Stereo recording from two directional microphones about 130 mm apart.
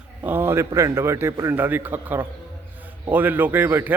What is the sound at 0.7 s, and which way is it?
A man's voice, 20° right (ahead or behind).